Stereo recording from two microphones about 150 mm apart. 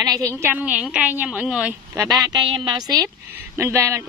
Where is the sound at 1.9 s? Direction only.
25° right (ahead or behind).